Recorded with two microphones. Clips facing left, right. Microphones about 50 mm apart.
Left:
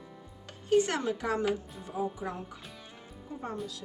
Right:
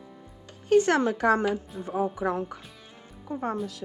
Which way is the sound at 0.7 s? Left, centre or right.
Right.